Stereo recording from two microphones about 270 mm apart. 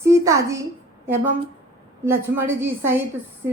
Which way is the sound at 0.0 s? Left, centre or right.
Centre.